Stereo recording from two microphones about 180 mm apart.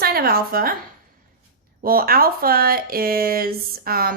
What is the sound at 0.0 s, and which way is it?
Speech, 60° right (ahead or behind).